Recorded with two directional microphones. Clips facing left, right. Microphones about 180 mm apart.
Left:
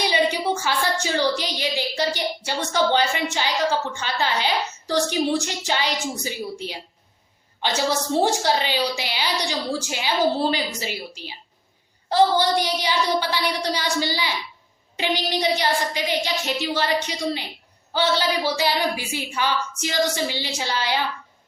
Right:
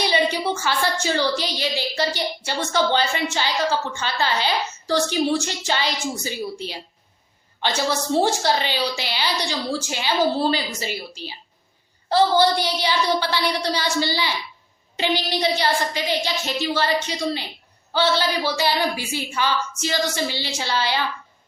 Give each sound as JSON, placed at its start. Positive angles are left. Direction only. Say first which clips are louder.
{"t": 0.0, "sound": "a woman's voice", "louder": "even", "side_deg": 15}